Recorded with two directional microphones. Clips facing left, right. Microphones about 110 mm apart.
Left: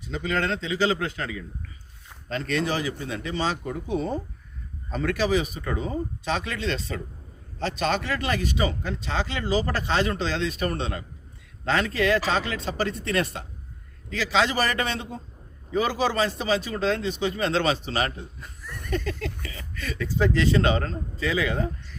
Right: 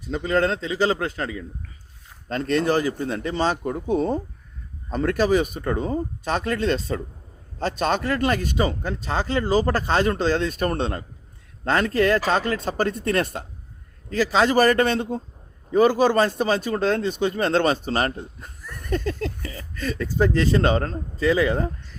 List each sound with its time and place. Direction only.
0.1 s a man's voice: 40° right (ahead or behind)
2.3 s speech: 45° right (ahead or behind)